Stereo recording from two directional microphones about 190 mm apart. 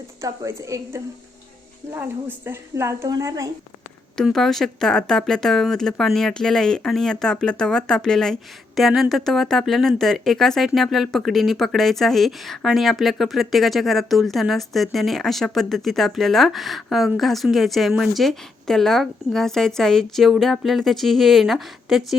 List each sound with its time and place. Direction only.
0.2 s a woman's voice: 15° right (ahead or behind)
4.2 s speech: centre (ahead or behind)